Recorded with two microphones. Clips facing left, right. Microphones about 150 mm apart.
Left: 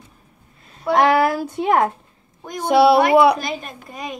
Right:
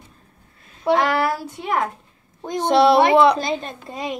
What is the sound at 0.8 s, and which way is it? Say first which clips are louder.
Speech: even; 25° right (ahead or behind).